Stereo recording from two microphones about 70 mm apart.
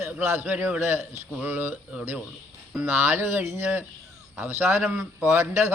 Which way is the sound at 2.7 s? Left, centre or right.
Right.